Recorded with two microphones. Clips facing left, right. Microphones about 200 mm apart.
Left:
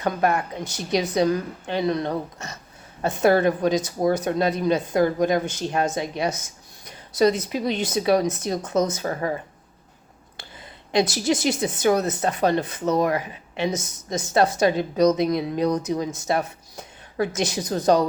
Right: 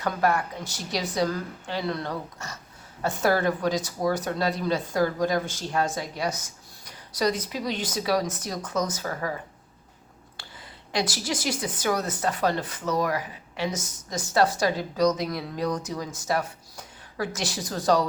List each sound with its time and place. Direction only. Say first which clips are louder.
0.0 s speech: left 2 dB; 20° left (ahead or behind)
10.9 s speech: left 7 dB; 20° left (ahead or behind)